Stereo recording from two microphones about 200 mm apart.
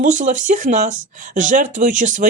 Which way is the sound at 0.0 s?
40° right (ahead or behind).